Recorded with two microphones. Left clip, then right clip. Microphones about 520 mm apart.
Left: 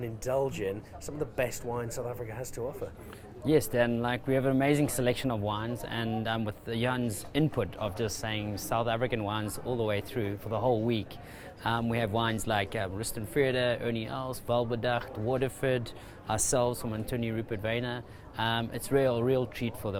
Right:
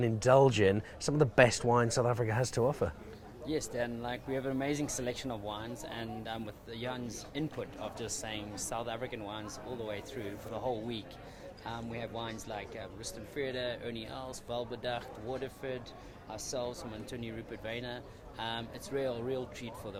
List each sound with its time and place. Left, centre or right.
0.0 s speech: right
3.4 s speech: left